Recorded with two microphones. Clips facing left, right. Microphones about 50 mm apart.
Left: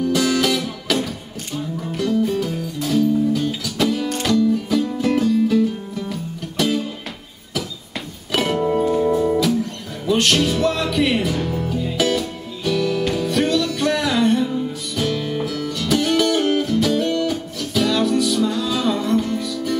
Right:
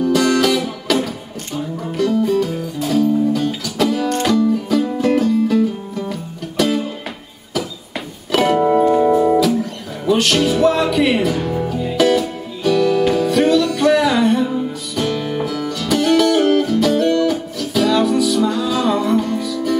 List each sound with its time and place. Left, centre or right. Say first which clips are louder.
0.0 s music: right 4 dB; centre
8.3 s music: right 6 dB; centre
8.5 s music: right 5 dB; centre
9.4 s music: right 3 dB; centre